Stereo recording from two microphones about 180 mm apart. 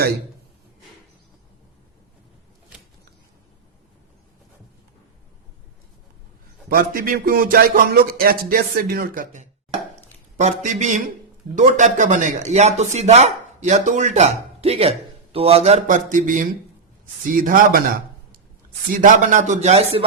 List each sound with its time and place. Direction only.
6.7 s speech: 55° right (ahead or behind)
18.9 s speech: 50° right (ahead or behind)